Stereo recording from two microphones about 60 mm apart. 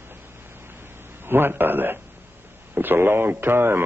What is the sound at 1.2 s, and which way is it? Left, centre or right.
A man's voice, right.